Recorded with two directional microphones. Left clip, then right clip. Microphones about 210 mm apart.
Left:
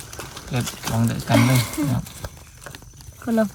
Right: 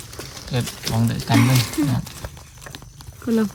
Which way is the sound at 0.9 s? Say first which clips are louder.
Even; 10° right (ahead or behind).